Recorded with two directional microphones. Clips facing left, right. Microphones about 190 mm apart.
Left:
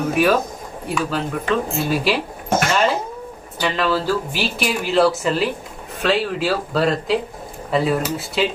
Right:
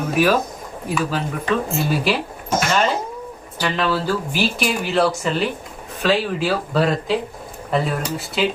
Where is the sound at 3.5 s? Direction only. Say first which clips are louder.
Left 1 dB; centre (ahead or behind).